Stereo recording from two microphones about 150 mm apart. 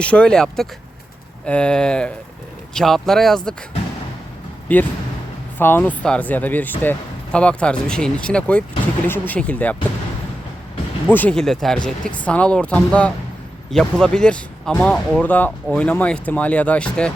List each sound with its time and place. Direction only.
0.0 s speech: 10° left (ahead or behind)
4.7 s speech: 10° left (ahead or behind)
11.1 s speech: 10° left (ahead or behind)